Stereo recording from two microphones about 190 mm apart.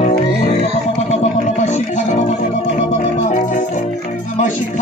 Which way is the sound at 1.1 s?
35° left (ahead or behind).